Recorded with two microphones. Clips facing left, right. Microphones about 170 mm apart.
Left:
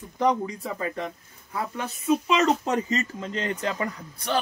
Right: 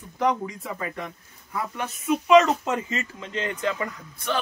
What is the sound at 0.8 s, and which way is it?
Speech, 30° left (ahead or behind).